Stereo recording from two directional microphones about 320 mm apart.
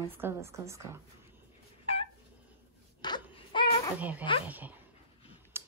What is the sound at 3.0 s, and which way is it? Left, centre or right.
Wail, centre.